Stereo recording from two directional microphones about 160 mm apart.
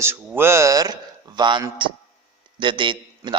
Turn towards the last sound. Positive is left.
turn(degrees=-30)  # may be behind; listen again after turning